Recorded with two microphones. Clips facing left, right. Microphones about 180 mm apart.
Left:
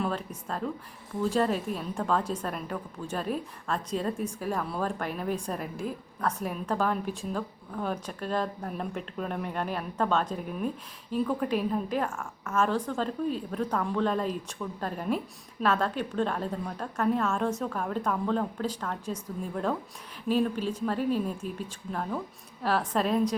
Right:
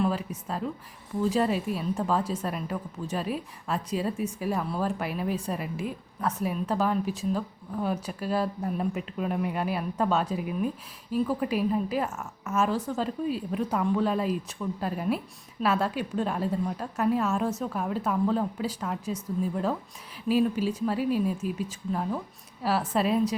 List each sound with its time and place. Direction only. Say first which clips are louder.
0.0 s a woman's voice: right 4 dB; 5° right (ahead or behind)
20.2 s a woman's voice: right 2 dB; 10° right (ahead or behind)